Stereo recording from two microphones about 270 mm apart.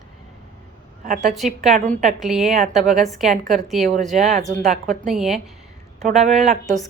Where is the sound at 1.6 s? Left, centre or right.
Centre.